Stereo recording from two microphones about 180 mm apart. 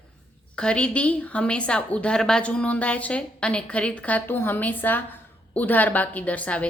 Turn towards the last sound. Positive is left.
turn(degrees=5)  # may be behind; listen again after turning